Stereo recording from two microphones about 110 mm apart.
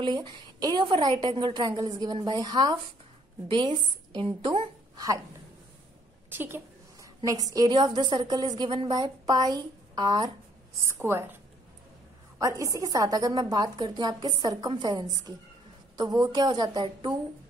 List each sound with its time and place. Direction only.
0.0 s a woman's voice: 45° right (ahead or behind)
3.4 s a woman's voice: 50° right (ahead or behind)
4.9 s a sound: 30° right (ahead or behind)
6.3 s a sound: 20° right (ahead or behind)
7.2 s a woman's voice: 30° right (ahead or behind)
11.0 s a woman's voice: 20° right (ahead or behind)
12.4 s a woman's voice: 30° right (ahead or behind)